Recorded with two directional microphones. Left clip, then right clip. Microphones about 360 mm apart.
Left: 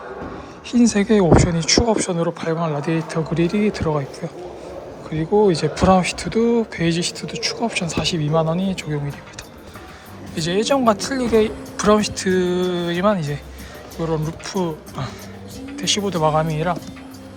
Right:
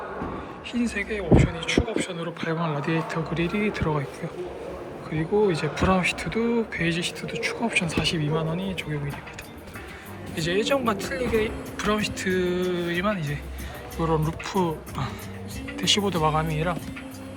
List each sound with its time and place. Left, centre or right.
0.7 s speech: centre
1.2 s speech: left
1.6 s speech: centre
5.1 s speech: centre
10.3 s speech: centre